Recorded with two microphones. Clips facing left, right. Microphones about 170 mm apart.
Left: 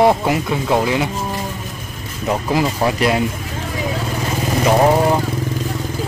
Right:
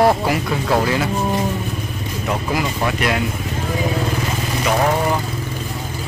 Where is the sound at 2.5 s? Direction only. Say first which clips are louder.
Left 5 dB; 30° left (ahead or behind).